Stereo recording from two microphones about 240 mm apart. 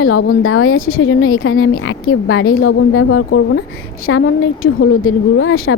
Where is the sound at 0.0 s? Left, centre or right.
Left.